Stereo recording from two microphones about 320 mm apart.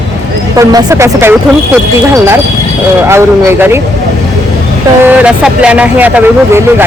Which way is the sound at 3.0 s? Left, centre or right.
Centre.